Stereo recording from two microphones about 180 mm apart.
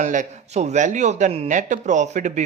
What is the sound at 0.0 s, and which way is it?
Speech, 40° right (ahead or behind).